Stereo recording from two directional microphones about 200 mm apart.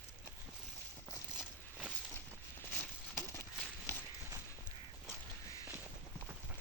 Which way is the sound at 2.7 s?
10° left (ahead or behind).